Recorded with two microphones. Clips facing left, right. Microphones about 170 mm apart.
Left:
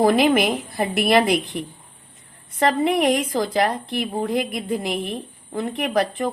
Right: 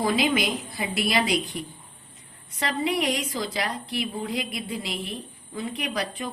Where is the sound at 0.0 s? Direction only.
55° left (ahead or behind).